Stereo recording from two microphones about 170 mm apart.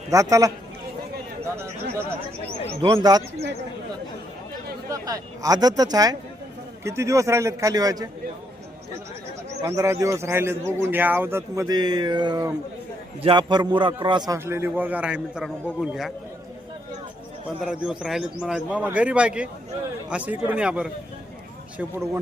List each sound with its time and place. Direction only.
0.1 s speech: 20° right (ahead or behind)
2.8 s speech: 25° right (ahead or behind)
4.9 s a man's voice: 20° right (ahead or behind)
9.6 s a man's voice: 20° right (ahead or behind)
17.6 s a man's voice: centre (ahead or behind)